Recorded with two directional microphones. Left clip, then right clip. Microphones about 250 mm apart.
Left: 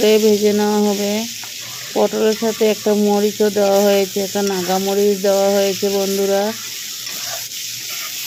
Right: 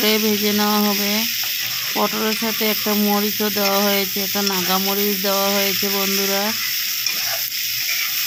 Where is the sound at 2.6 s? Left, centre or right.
Right.